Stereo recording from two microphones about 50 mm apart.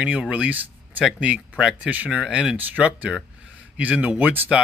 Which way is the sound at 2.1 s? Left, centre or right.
Centre.